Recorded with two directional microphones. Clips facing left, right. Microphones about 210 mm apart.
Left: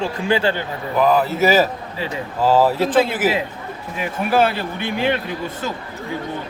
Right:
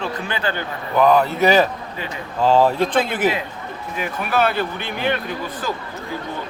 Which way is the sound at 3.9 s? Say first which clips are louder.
Left 3 dB; 30° left (ahead or behind).